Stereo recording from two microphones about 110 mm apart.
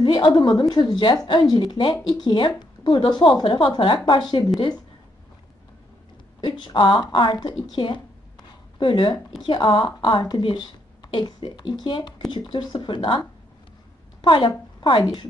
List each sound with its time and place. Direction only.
0.0 s a woman's voice: 45° left (ahead or behind)
6.4 s a woman's voice: 45° left (ahead or behind)
7.6 s a sound: 45° left (ahead or behind)
9.4 s a woman's voice: 45° left (ahead or behind)
14.2 s a woman's voice: 50° left (ahead or behind)